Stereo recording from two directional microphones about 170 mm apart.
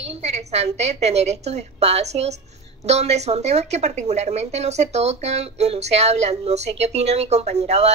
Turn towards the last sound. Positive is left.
turn(degrees=-40)  # may be behind; listen again after turning